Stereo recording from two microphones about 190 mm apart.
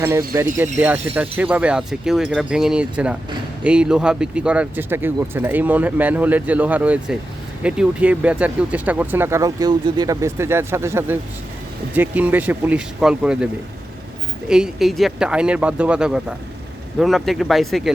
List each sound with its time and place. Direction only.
0.0 s speech: 15° right (ahead or behind); by 17.9 s centre (ahead or behind)